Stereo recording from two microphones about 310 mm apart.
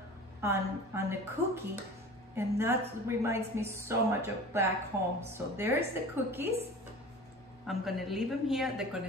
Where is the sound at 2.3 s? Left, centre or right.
Centre.